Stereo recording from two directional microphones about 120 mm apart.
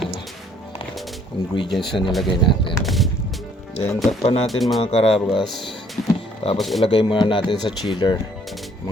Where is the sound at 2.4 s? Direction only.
45° left (ahead or behind).